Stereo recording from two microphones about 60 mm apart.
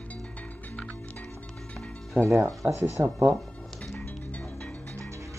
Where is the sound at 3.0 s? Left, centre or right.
Right.